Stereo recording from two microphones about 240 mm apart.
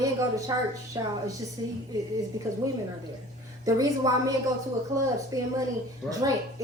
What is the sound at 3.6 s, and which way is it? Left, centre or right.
Speech, centre.